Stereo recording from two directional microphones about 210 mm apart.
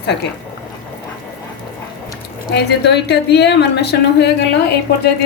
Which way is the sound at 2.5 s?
50° left (ahead or behind).